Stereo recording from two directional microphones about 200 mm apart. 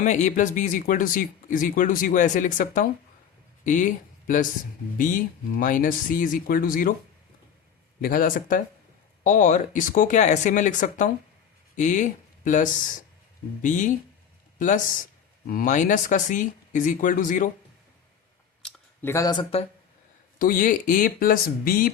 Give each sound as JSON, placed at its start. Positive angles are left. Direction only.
{"t": 0.0, "sound": "speech", "side_deg": 35}
{"t": 5.5, "sound": "speech", "side_deg": 45}
{"t": 8.0, "sound": "speech", "side_deg": 45}
{"t": 15.4, "sound": "speech", "side_deg": 40}
{"t": 18.6, "sound": "a sound", "side_deg": 15}
{"t": 20.4, "sound": "speech", "side_deg": 45}